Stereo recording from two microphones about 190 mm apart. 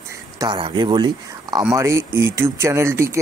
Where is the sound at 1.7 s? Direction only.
15° right (ahead or behind).